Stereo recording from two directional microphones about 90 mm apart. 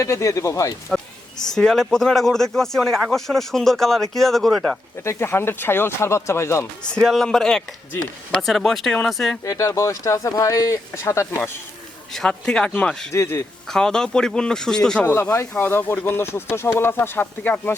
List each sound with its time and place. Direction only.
0.0 s speech: 35° left (ahead or behind)
0.9 s a sound: 5° left (ahead or behind)
1.5 s speech: 5° left (ahead or behind)
5.0 s speech: 30° left (ahead or behind)
6.9 s speech: centre (ahead or behind)
9.4 s speech: 35° left (ahead or behind)
12.1 s speech: 10° left (ahead or behind)
13.1 s speech: 30° left (ahead or behind)
13.7 s speech: 5° left (ahead or behind)
15.0 s speech: 30° left (ahead or behind)
15.5 s speech: 20° left (ahead or behind)